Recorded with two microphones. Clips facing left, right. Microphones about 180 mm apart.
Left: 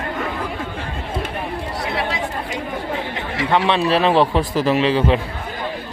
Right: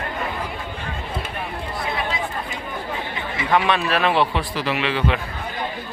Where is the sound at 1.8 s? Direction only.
75° left (ahead or behind).